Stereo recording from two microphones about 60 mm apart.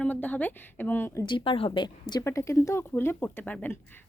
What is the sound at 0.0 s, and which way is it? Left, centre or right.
Speech, left.